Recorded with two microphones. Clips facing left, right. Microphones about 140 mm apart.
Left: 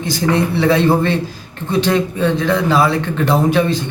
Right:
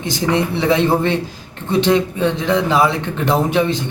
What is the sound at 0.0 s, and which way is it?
Speech, 20° right (ahead or behind).